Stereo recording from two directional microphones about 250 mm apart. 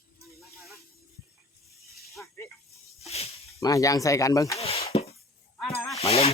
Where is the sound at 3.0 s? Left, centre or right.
Left.